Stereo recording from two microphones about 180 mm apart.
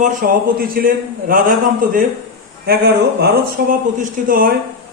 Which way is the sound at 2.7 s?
60° right (ahead or behind).